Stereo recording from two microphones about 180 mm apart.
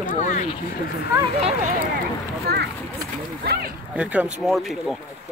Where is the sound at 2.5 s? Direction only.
65° right (ahead or behind).